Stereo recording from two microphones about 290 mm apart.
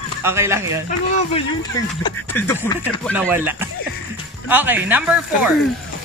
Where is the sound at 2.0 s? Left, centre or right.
Centre.